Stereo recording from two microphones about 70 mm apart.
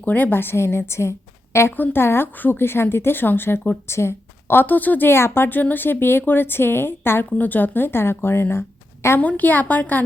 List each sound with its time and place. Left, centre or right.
0.0 s a woman's voice: left
1.7 s a woman's voice: left
9.1 s a woman's voice: left